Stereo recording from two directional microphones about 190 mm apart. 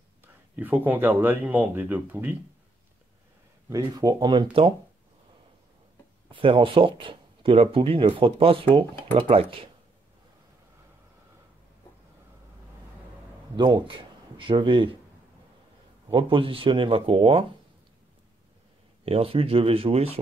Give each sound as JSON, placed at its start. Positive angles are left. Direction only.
{"t": 0.2, "sound": "speech", "side_deg": -10}
{"t": 3.6, "sound": "speech", "side_deg": -20}
{"t": 6.3, "sound": "speech", "side_deg": -25}
{"t": 13.6, "sound": "a man's voice", "side_deg": -25}
{"t": 16.1, "sound": "speech", "side_deg": -25}
{"t": 19.0, "sound": "speech", "side_deg": -30}